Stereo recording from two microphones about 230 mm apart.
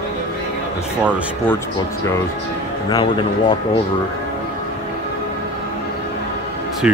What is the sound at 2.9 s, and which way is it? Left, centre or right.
Speech, left.